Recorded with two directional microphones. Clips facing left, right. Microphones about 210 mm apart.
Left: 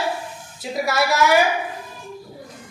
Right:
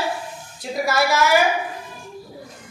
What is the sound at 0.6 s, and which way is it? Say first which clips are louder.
Speech: right 1 dB; centre (ahead or behind).